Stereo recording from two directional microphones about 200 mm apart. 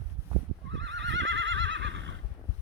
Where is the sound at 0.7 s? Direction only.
65° right (ahead or behind).